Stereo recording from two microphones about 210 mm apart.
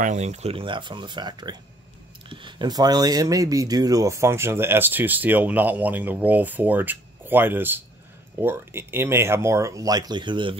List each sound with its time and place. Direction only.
0.0 s speech: 35° right (ahead or behind)